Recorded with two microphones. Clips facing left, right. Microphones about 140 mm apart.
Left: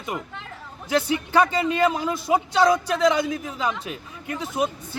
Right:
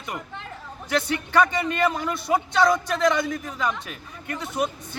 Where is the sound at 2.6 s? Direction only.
5° left (ahead or behind).